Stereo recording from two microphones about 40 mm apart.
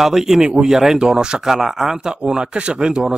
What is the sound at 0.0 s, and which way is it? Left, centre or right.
Speech, centre.